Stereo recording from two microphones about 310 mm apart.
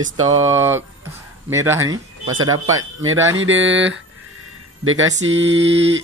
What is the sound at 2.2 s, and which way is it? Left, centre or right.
A man's voice, right.